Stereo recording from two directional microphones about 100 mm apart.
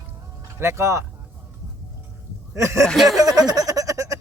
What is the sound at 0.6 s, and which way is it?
Speech, 25° right (ahead or behind).